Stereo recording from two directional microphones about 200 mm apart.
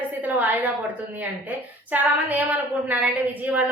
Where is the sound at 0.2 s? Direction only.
10° right (ahead or behind).